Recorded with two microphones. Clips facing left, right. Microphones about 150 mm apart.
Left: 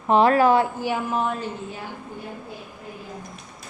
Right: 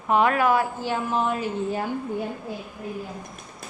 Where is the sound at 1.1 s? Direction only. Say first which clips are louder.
Even; centre (ahead or behind).